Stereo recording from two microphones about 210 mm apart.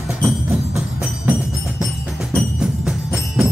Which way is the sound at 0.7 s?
Centre (ahead or behind).